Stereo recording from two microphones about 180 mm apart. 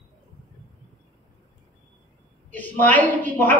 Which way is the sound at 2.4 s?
10° left (ahead or behind).